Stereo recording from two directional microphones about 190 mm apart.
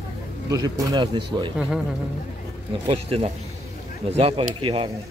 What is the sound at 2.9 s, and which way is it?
Speech, 30° right (ahead or behind).